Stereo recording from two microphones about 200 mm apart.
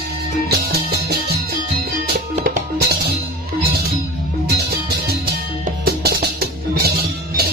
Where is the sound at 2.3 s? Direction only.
50° right (ahead or behind).